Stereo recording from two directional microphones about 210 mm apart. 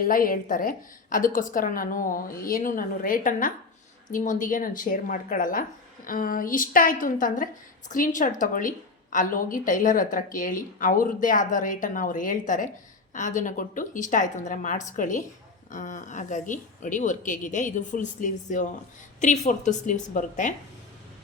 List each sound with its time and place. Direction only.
0.0 s a woman's voice: 40° left (ahead or behind)